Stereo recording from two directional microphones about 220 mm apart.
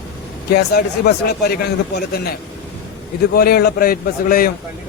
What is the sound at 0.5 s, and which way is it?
A man's voice, 45° left (ahead or behind).